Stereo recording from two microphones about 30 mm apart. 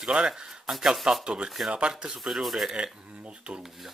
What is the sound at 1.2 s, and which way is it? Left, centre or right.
Speech, right.